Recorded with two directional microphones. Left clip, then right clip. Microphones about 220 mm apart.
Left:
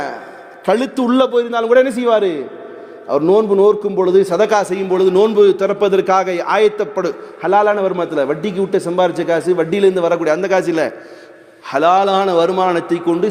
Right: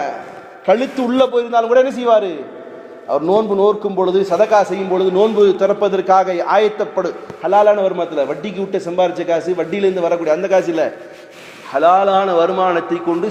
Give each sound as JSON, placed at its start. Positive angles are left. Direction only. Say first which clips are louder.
{"t": 0.6, "sound": "a man's voice", "louder": "right 1 dB", "side_deg": 50}